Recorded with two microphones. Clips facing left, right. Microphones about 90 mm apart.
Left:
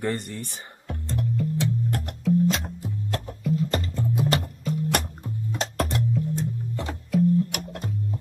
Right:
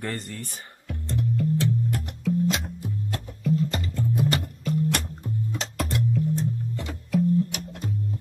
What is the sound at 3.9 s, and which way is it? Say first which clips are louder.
Music: even; 20° left (ahead or behind).